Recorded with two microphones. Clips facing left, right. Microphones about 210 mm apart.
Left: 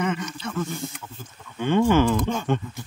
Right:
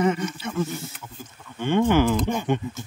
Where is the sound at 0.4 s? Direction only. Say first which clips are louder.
Right 1 dB; 10° right (ahead or behind).